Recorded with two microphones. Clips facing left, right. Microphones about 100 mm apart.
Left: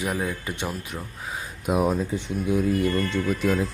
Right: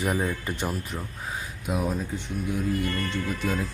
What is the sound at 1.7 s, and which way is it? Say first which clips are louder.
Speech: left 6 dB; 70° left (ahead or behind).